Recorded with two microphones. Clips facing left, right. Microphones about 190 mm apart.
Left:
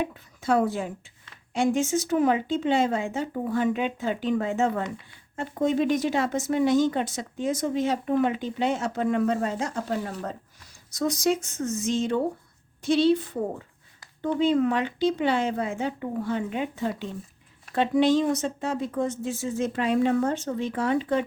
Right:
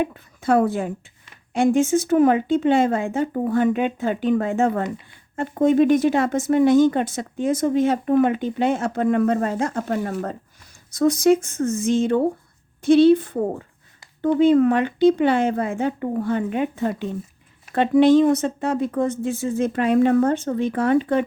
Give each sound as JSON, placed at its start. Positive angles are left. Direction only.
{"t": 0.0, "sound": "speech", "side_deg": -55}